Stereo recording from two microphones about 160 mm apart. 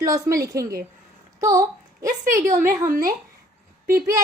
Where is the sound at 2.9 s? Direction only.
65° right (ahead or behind).